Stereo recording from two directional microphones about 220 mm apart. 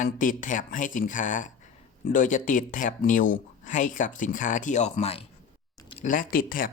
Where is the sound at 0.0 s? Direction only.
35° left (ahead or behind).